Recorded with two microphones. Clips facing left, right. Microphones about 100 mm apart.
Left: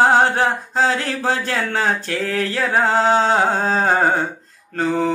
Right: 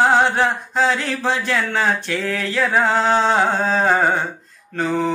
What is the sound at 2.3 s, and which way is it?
Chant, 45° left (ahead or behind).